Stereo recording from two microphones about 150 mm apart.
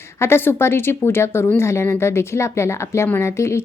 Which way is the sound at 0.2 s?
15° left (ahead or behind).